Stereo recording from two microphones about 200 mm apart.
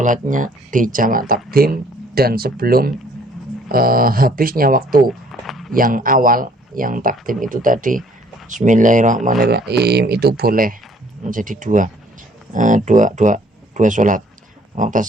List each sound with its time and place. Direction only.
0.0 s speech: 40° right (ahead or behind)
5.3 s a sound: centre (ahead or behind)
5.7 s speech: 45° right (ahead or behind)
9.7 s speech: 55° right (ahead or behind)